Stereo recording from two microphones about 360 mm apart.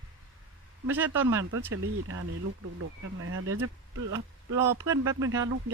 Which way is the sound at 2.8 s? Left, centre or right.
Right.